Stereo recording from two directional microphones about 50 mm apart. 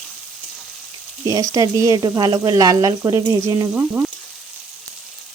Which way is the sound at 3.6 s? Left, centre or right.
Right.